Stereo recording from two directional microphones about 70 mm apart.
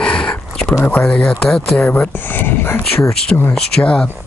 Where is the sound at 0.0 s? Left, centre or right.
Centre.